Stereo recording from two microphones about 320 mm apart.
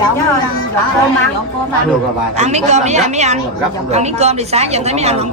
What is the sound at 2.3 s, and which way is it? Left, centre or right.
Speech, right.